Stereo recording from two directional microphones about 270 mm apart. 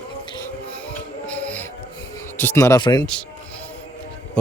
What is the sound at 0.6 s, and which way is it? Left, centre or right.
Music, centre.